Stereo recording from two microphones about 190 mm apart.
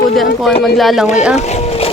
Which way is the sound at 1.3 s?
35° left (ahead or behind).